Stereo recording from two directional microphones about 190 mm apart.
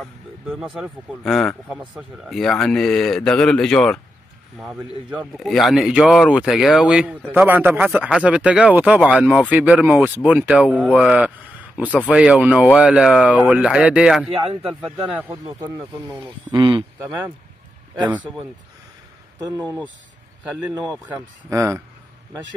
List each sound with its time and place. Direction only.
0.0 s music: centre (ahead or behind)
0.7 s a man's voice: centre (ahead or behind)
14.5 s speech: 25° right (ahead or behind)
14.8 s speech: 10° right (ahead or behind)
16.5 s speech: 25° right (ahead or behind)
19.5 s speech: 15° right (ahead or behind)
21.1 s speech: 15° right (ahead or behind)